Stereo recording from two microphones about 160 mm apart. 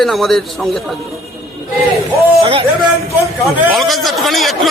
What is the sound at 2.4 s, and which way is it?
Speech, 35° right (ahead or behind).